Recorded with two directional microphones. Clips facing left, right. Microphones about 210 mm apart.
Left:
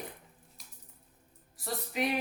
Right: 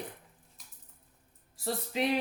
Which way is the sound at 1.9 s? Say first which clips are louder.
Right 1 dB; 25° right (ahead or behind).